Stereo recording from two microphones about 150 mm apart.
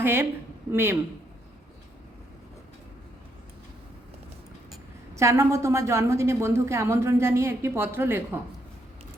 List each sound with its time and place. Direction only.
0.0 s speech: 15° right (ahead or behind)
5.1 s a woman's voice: 20° right (ahead or behind)